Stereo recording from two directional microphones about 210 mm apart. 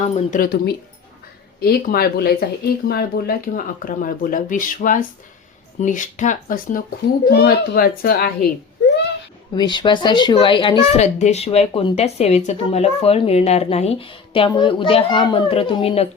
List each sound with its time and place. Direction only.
0.0 s speech: 40° left (ahead or behind)
7.3 s speech: 50° left (ahead or behind)
9.6 s speech: 20° left (ahead or behind)